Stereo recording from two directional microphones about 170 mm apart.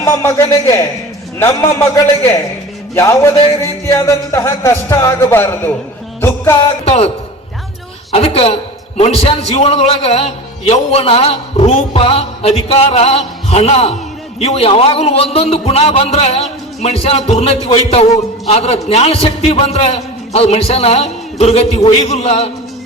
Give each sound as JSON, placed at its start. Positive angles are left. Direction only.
{"t": 0.0, "sound": "a man's voice", "side_deg": 15}
{"t": 6.8, "sound": "a man's voice", "side_deg": 35}
{"t": 8.1, "sound": "a man's voice", "side_deg": 35}